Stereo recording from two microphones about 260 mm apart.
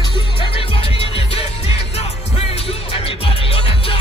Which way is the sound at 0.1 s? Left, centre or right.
Left.